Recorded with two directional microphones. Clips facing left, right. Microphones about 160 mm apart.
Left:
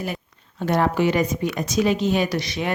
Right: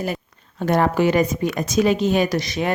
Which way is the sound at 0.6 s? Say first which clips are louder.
Right 2 dB; 50° right (ahead or behind).